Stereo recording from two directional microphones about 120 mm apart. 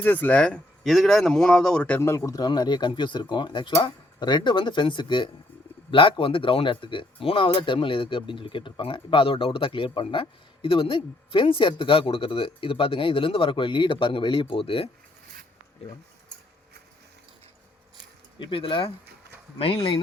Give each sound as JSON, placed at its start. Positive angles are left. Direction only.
{"t": 0.0, "sound": "speech", "side_deg": 15}
{"t": 2.0, "sound": "speech", "side_deg": 25}
{"t": 18.3, "sound": "speech", "side_deg": 45}